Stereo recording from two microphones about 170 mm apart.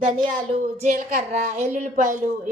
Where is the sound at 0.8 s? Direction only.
50° right (ahead or behind).